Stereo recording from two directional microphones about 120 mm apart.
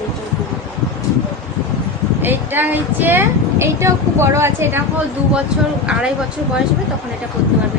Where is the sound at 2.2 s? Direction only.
15° right (ahead or behind).